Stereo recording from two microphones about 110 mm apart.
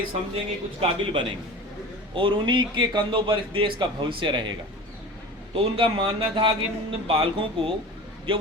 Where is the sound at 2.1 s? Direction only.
50° right (ahead or behind).